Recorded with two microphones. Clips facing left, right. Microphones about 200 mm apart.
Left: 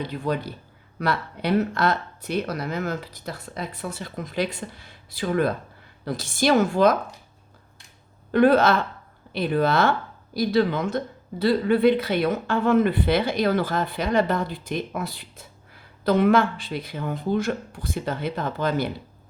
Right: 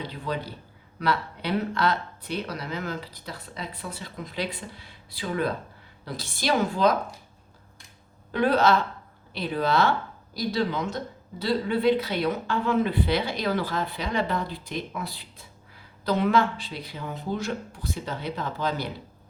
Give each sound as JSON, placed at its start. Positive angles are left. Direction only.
{"t": 0.1, "sound": "speech", "side_deg": 55}
{"t": 8.3, "sound": "speech", "side_deg": 55}